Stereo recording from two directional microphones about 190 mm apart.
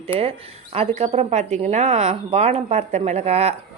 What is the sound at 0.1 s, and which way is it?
Speech, 30° right (ahead or behind).